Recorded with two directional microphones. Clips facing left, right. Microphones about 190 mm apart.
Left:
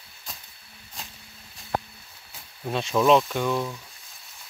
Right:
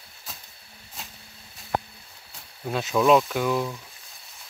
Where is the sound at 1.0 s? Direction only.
Centre (ahead or behind).